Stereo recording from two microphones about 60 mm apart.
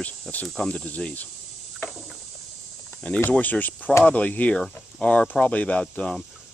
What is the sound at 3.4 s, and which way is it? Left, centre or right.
Speech, left.